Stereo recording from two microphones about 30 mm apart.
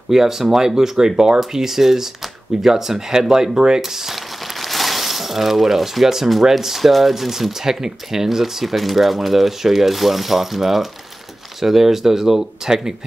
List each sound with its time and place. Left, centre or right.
0.1 s speech: centre
1.4 s speech: centre
3.8 s a sound: centre
6.0 s speech: centre